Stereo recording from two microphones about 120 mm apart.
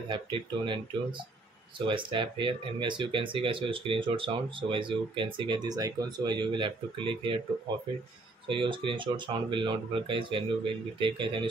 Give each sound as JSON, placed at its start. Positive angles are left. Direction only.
{"t": 0.1, "sound": "speech", "side_deg": -40}
{"t": 8.5, "sound": "speech", "side_deg": -45}